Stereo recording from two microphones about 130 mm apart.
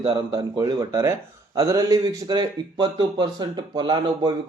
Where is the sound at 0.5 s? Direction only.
25° right (ahead or behind).